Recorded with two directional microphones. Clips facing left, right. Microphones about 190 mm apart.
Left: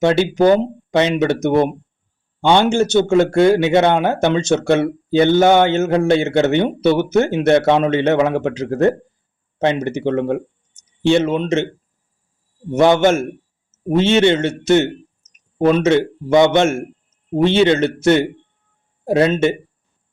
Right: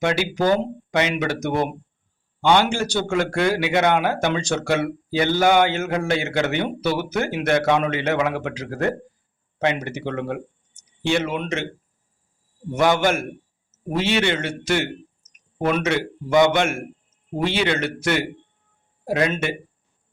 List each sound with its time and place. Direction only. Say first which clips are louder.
0.0 s speech: left 7 dB; 25° left (ahead or behind)
12.7 s speech: left 6 dB; 25° left (ahead or behind)